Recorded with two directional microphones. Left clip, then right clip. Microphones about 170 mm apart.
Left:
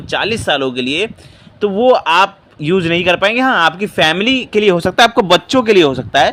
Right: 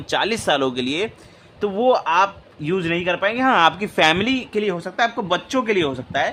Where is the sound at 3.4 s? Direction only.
15° left (ahead or behind).